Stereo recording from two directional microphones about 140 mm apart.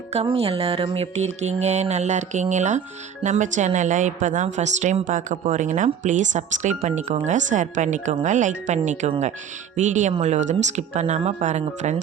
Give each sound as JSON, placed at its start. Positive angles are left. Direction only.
{"t": 0.1, "sound": "music", "side_deg": -45}
{"t": 3.2, "sound": "a woman's voice", "side_deg": -60}
{"t": 9.0, "sound": "music", "side_deg": -50}
{"t": 9.7, "sound": "a woman's voice", "side_deg": -60}